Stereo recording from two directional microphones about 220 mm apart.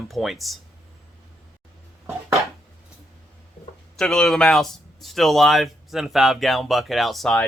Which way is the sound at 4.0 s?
Centre (ahead or behind).